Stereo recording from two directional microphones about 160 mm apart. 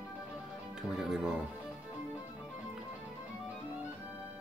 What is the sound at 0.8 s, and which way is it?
Speech, 5° right (ahead or behind).